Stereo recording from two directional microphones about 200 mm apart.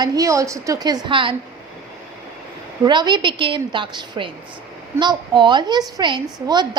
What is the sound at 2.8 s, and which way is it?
A woman's voice, 20° right (ahead or behind).